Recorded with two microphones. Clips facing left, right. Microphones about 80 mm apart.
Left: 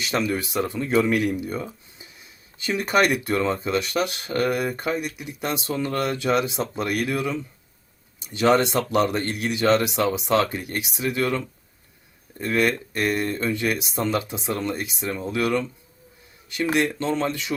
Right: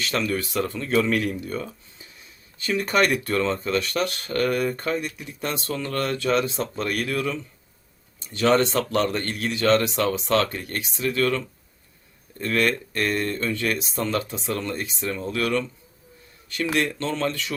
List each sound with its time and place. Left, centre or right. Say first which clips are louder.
0.0 s speech: left 1 dB; centre
16.7 s speech: left 2 dB; centre